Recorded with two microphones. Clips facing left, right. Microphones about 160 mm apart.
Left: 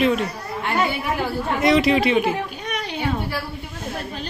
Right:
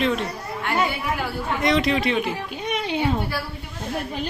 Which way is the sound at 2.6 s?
20° right (ahead or behind).